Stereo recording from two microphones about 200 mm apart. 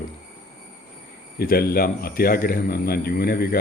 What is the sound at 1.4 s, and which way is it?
Speech, 50° left (ahead or behind).